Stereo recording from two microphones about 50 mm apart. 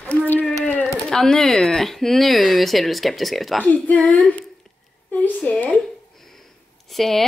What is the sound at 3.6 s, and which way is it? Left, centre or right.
Speech, left.